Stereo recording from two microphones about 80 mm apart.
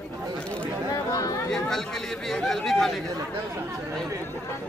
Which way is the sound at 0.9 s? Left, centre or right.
Left.